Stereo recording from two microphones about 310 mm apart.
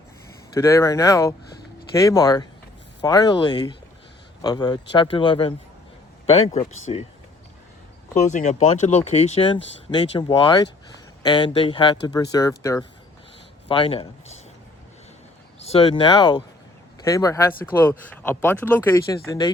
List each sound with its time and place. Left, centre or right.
0.5 s speech: centre
8.1 s speech: left
15.6 s speech: centre